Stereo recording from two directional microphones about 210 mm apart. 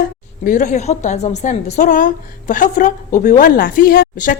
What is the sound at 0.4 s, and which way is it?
A woman's voice, 35° left (ahead or behind).